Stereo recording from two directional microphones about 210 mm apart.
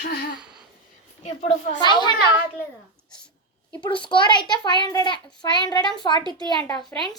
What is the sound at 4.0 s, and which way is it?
A child's voice, 20° left (ahead or behind).